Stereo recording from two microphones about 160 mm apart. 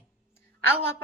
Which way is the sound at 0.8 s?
15° left (ahead or behind).